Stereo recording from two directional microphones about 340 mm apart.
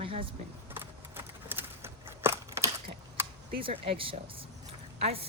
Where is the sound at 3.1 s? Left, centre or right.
Centre.